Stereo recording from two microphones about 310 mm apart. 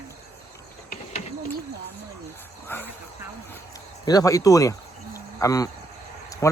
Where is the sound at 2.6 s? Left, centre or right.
Centre.